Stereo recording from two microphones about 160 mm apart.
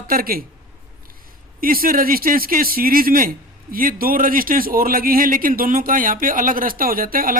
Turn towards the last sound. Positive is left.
turn(degrees=-60)  # may be behind; listen again after turning